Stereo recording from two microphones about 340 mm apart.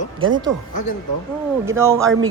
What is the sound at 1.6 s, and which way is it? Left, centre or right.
Speech, centre.